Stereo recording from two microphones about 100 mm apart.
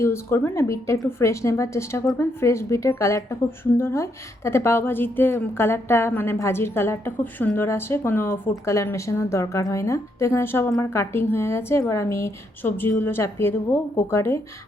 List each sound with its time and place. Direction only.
0.0 s a woman's voice: 25° left (ahead or behind)